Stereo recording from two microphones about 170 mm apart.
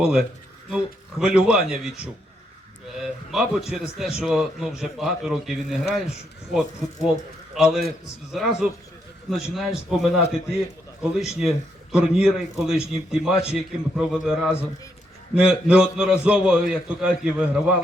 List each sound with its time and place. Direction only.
0.0 s a man's voice: 5° right (ahead or behind)
9.9 s a man's voice: centre (ahead or behind)